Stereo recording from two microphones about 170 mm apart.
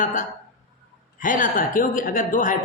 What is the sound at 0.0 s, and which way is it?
A woman's voice, 50° left (ahead or behind).